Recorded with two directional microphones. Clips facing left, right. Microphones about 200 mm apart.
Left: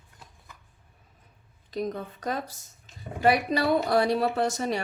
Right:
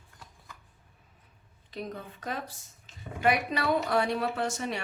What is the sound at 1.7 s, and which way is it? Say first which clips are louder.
Speech: left 7 dB; 40° left (ahead or behind).